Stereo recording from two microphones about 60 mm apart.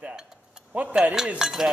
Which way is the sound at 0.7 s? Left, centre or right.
Right.